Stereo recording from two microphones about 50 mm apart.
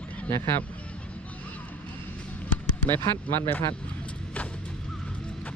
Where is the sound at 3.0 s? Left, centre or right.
Left.